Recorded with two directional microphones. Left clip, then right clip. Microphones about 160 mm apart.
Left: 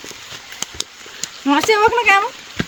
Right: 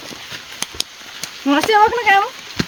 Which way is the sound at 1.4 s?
90° left.